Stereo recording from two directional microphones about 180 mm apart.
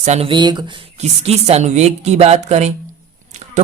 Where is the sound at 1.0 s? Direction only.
35° right (ahead or behind).